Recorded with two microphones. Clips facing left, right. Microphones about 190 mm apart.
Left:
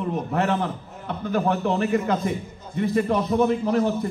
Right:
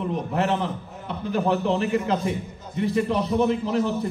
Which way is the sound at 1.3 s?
50° left (ahead or behind).